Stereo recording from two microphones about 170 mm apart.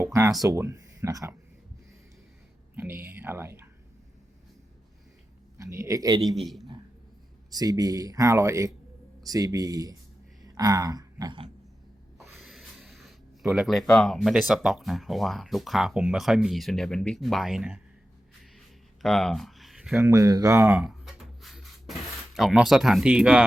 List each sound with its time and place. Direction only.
0.0 s a sound: 15° right (ahead or behind)
0.4 s speech: 20° right (ahead or behind)
2.7 s speech: 10° right (ahead or behind)
5.5 s speech: 20° right (ahead or behind)
6.2 s speech: centre (ahead or behind)
7.5 s speech: 20° right (ahead or behind)
12.2 s snort: centre (ahead or behind)
13.5 s speech: centre (ahead or behind)
19.0 s a sound: 5° left (ahead or behind)
20.0 s speech: 20° right (ahead or behind)
20.7 s a sound: 5° right (ahead or behind)
22.4 s speech: centre (ahead or behind)